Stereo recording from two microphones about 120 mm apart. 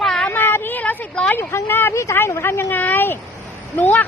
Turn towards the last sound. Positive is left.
turn(degrees=15)  # may be behind; listen again after turning